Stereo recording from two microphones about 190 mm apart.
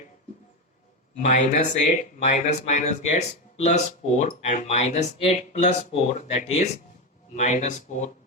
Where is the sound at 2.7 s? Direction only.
35° left (ahead or behind).